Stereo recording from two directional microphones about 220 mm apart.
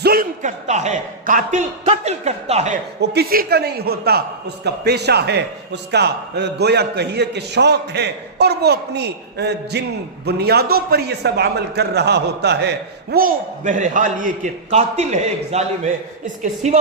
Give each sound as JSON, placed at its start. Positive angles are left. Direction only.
{"t": 0.0, "sound": "speech", "side_deg": -40}
{"t": 3.0, "sound": "a man's voice", "side_deg": -50}